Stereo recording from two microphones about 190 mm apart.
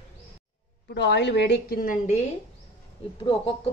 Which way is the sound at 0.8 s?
65° left (ahead or behind).